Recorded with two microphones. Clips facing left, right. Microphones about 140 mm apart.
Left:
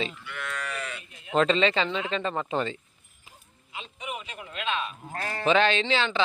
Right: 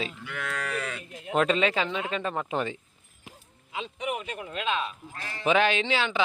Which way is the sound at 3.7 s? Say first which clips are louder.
Right 5 dB; 80° right.